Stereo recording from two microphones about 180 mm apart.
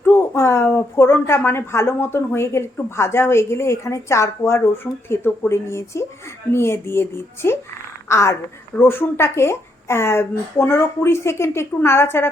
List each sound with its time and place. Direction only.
0.0 s a woman's voice: 15° left (ahead or behind)